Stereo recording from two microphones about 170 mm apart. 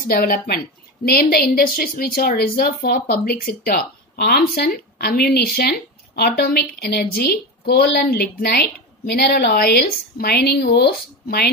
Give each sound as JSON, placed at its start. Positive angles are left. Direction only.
{"t": 0.1, "sound": "a woman's voice", "side_deg": 60}